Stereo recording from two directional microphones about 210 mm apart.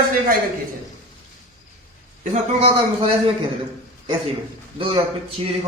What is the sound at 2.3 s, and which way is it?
Speech, 30° right (ahead or behind).